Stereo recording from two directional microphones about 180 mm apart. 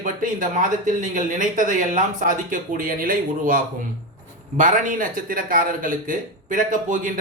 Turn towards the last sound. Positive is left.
turn(degrees=-50)  # may be behind; listen again after turning